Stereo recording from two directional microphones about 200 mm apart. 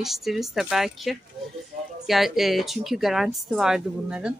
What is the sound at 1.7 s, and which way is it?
Music, 40° right (ahead or behind).